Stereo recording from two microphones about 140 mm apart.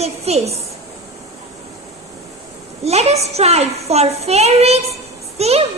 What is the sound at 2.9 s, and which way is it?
A woman's voice, 50° right (ahead or behind).